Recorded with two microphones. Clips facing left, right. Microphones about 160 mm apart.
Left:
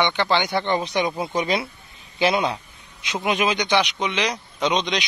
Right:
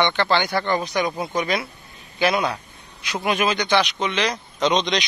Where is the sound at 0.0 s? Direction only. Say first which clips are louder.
Right 1 dB; 15° left (ahead or behind).